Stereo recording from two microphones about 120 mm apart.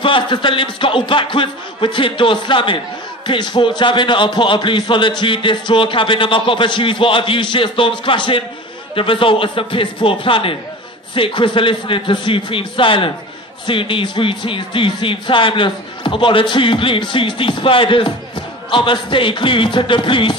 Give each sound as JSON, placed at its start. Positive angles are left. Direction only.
{"t": 0.0, "sound": "speech", "side_deg": 45}